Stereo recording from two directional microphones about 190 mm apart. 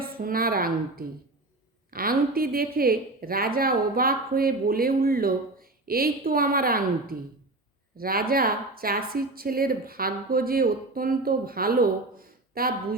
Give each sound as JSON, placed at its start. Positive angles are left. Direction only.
{"t": 0.0, "sound": "a woman's voice", "side_deg": -50}